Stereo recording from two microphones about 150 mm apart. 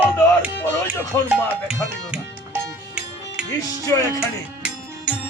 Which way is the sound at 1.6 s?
10° right (ahead or behind).